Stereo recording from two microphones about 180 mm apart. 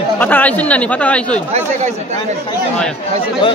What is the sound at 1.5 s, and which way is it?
Speech, 35° right (ahead or behind).